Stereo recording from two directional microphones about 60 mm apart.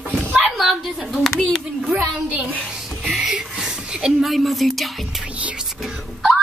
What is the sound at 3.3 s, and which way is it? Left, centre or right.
Speech, centre.